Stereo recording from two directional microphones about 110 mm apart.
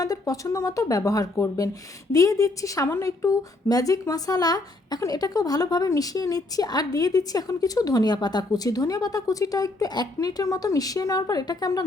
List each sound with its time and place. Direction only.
0.0 s a woman's voice: 30° left (ahead or behind)